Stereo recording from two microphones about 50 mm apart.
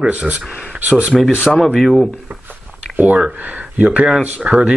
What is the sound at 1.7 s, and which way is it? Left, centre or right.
Speech, centre.